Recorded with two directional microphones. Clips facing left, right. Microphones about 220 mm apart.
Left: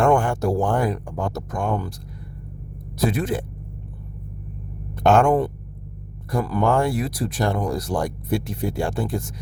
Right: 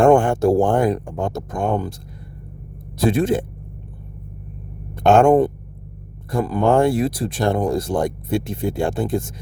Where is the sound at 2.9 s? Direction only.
30° right (ahead or behind).